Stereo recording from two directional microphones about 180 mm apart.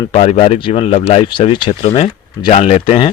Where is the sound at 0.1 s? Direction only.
35° left (ahead or behind).